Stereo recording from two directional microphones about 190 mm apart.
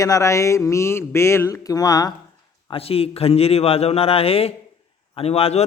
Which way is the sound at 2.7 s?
30° left (ahead or behind).